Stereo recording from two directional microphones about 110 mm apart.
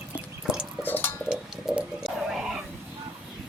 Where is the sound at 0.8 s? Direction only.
15° left (ahead or behind).